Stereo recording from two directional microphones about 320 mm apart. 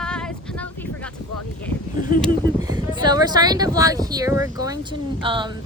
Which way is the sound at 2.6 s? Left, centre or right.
Centre.